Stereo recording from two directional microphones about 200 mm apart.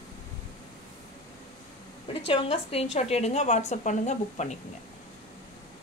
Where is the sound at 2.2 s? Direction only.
30° left (ahead or behind).